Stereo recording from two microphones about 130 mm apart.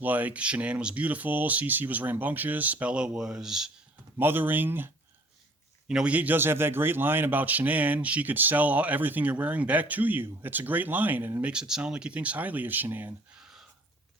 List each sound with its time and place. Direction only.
0.0 s a man's voice: 15° right (ahead or behind)
4.2 s a man's voice: 15° right (ahead or behind)
5.9 s a man's voice: 10° right (ahead or behind)
13.3 s a sound: 5° right (ahead or behind)